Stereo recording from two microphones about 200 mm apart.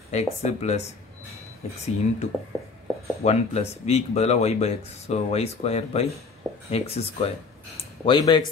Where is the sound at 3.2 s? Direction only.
35° left (ahead or behind).